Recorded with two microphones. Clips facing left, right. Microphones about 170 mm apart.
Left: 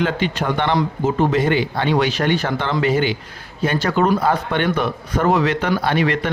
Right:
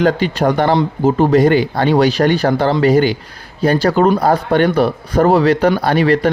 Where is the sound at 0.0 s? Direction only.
40° right (ahead or behind).